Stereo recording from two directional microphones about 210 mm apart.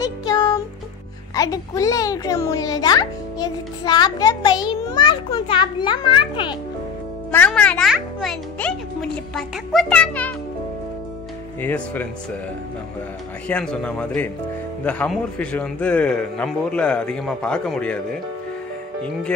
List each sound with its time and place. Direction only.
0.0 s music: 20° left (ahead or behind)
1.3 s a child's voice: 15° left (ahead or behind)
7.2 s a man's voice: 5° left (ahead or behind)
11.6 s speech: 10° left (ahead or behind)
13.5 s a man's voice: 5° left (ahead or behind)